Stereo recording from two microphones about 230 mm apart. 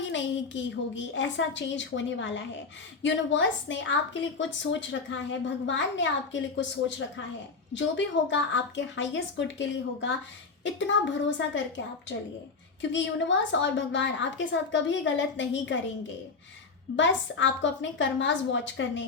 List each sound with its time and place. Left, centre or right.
0.0 s a woman's voice: left
12.8 s a woman's voice: left